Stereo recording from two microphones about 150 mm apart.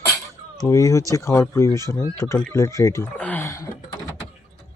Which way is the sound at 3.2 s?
15° left (ahead or behind).